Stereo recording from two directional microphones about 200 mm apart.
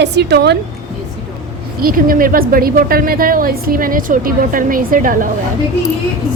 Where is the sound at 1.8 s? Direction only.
45° right (ahead or behind).